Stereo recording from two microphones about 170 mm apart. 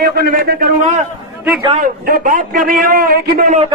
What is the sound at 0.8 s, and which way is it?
Speech, 45° right (ahead or behind).